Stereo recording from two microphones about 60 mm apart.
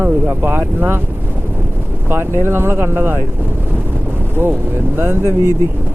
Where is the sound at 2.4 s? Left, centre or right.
Right.